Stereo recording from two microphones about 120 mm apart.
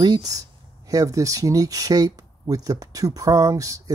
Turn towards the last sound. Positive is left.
turn(degrees=-30)  # may be behind; listen again after turning